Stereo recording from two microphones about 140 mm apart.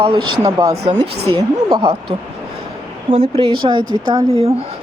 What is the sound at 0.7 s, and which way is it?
Speech, 45° right (ahead or behind).